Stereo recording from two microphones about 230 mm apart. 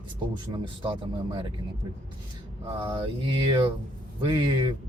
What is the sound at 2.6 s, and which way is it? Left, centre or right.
Speech, right.